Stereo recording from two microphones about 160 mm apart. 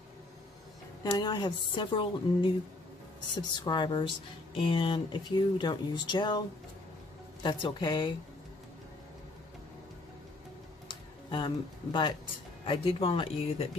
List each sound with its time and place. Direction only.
1.1 s speech: 25° left (ahead or behind)
3.6 s speech: 30° left (ahead or behind)
7.4 s speech: 30° left (ahead or behind)
10.9 s a sound: 30° left (ahead or behind)
12.6 s speech: 35° left (ahead or behind)